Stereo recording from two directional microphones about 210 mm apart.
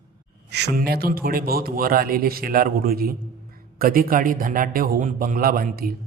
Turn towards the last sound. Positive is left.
turn(degrees=-45)  # may be behind; listen again after turning